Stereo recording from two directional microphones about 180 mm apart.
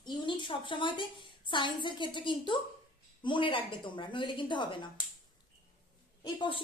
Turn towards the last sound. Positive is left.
turn(degrees=25)  # may be behind; listen again after turning